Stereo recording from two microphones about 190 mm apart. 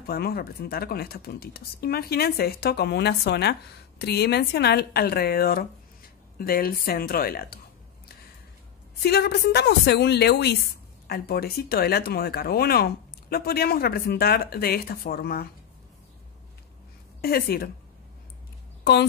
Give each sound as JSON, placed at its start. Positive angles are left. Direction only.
{"t": 0.0, "sound": "speech", "side_deg": 55}
{"t": 9.0, "sound": "speech", "side_deg": 55}
{"t": 17.2, "sound": "speech", "side_deg": 55}